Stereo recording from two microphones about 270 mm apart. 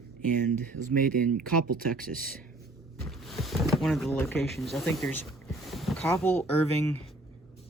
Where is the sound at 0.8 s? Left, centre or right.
Right.